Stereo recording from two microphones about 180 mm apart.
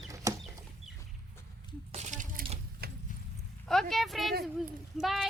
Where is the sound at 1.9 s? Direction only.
40° right (ahead or behind).